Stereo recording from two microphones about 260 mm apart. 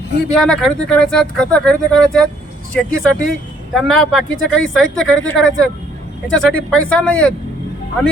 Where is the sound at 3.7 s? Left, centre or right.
Centre.